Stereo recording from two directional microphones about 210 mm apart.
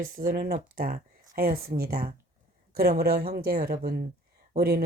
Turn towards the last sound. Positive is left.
turn(degrees=-45)  # may be behind; listen again after turning